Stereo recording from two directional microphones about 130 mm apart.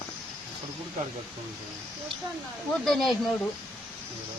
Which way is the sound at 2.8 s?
Centre (ahead or behind).